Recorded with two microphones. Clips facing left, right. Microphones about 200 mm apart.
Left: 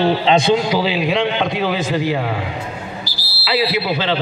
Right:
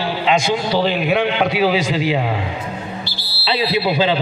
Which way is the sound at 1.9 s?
15° right (ahead or behind).